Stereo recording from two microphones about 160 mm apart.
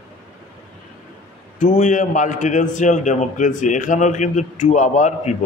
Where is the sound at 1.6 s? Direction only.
50° left (ahead or behind).